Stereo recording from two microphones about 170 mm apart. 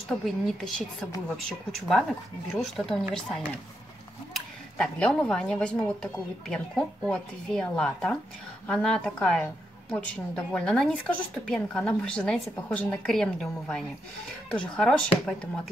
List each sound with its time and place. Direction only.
0.2 s a woman's voice: centre (ahead or behind)